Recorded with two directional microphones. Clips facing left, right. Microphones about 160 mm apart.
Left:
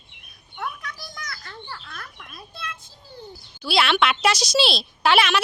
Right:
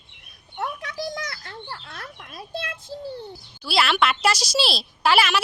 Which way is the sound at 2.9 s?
70° right (ahead or behind).